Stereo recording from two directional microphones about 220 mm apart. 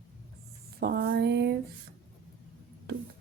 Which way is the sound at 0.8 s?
50° right (ahead or behind).